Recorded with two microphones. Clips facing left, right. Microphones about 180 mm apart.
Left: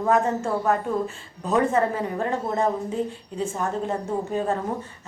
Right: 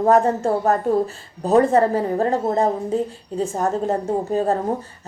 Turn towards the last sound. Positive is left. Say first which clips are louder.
# right 5 dB
turn(degrees=-35)  # may be behind; listen again after turning